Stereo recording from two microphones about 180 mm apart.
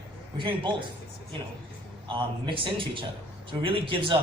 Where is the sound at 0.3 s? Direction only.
25° right (ahead or behind).